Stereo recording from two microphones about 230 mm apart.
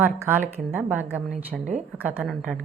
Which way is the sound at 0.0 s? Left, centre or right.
Centre.